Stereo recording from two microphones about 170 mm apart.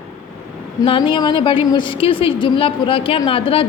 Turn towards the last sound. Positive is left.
turn(degrees=35)  # may be behind; listen again after turning